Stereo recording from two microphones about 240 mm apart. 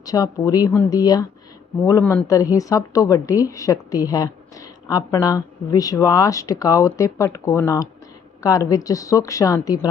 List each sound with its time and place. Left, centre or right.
0.0 s a woman's voice: centre